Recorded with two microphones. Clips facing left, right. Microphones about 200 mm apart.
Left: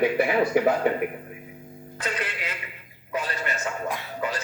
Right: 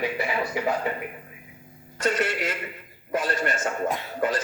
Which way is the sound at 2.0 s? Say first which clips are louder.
Right 7 dB; 45° right (ahead or behind).